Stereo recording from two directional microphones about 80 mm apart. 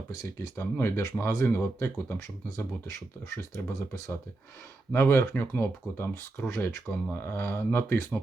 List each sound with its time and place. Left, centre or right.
0.5 s speech: left
2.9 s speech: left